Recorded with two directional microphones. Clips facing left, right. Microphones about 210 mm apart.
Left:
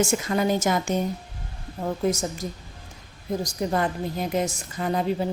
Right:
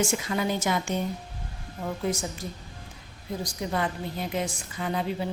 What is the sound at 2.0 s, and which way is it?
A woman's voice, 45° left (ahead or behind).